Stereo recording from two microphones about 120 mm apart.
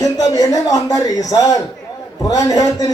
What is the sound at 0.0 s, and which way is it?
A man's voice, 30° left (ahead or behind).